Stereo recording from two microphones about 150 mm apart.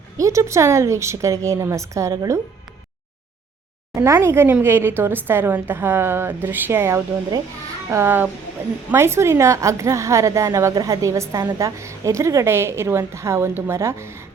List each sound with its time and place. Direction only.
0.2 s a woman's voice: 20° right (ahead or behind)
3.9 s a woman's voice: 20° right (ahead or behind)